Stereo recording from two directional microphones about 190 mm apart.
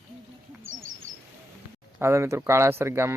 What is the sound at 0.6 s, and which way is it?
Owl, 90° right.